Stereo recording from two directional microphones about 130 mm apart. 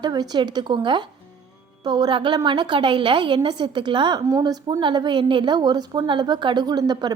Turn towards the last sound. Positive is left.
turn(degrees=-35)  # may be behind; listen again after turning